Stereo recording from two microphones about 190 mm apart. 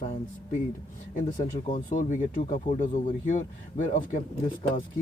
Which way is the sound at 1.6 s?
40° left (ahead or behind).